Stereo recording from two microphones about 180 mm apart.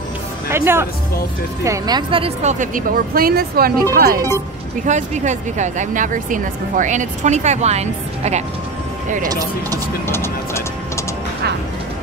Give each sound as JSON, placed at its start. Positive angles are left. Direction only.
{"t": 0.5, "sound": "speech", "side_deg": -15}
{"t": 4.8, "sound": "speech", "side_deg": -40}
{"t": 10.0, "sound": "speech", "side_deg": 15}